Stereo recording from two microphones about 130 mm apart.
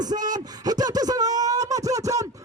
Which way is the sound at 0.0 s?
30° right (ahead or behind).